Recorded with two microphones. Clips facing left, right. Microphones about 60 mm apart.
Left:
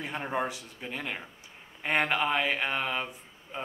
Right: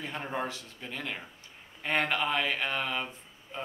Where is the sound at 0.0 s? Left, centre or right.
Centre.